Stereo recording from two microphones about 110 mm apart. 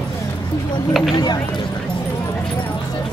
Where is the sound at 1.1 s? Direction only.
40° left (ahead or behind).